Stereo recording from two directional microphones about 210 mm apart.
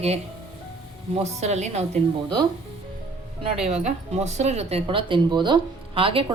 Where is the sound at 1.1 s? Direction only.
30° right (ahead or behind).